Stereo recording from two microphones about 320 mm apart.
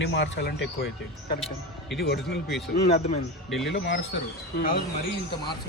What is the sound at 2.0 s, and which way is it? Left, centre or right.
Speech, left.